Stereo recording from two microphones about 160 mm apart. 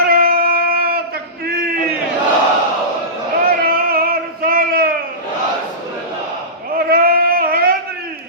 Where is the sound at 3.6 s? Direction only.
70° right (ahead or behind).